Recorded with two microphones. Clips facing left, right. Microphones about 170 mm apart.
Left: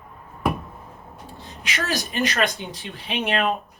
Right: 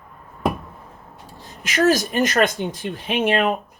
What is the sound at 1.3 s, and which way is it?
Speech, 45° right (ahead or behind).